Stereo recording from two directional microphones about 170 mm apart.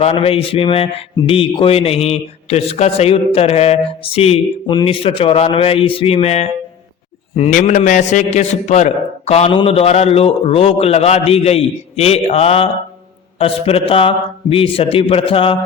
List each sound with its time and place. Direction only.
0.0 s a man's voice: 35° left (ahead or behind)